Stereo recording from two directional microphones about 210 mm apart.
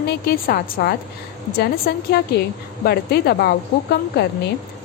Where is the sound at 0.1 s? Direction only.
45° left (ahead or behind).